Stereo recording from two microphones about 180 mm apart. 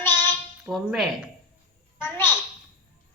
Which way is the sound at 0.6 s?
5° right (ahead or behind).